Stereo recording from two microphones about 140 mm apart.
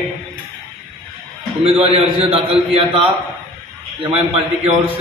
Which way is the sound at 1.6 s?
45° right (ahead or behind).